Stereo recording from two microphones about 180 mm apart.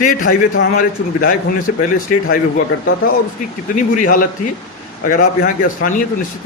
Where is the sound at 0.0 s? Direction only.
50° left (ahead or behind).